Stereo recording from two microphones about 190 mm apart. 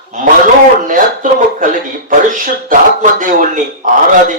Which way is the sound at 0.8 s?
45° right (ahead or behind).